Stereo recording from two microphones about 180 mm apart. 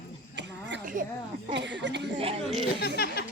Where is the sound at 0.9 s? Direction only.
50° right (ahead or behind).